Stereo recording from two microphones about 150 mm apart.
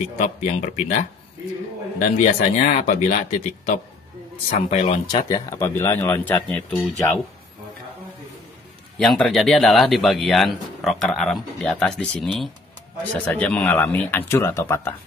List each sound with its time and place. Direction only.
0.2 s speech: 50° left (ahead or behind)
2.0 s speech: 50° left (ahead or behind)
5.0 s speech: 25° left (ahead or behind)
8.9 s speech: 5° left (ahead or behind); by 15.0 s 20° left (ahead or behind)